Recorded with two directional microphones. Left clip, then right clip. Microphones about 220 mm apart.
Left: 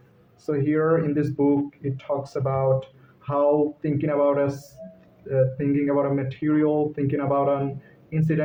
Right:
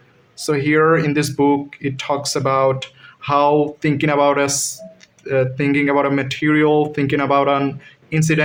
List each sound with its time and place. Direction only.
0.4 s speech: 30° right (ahead or behind)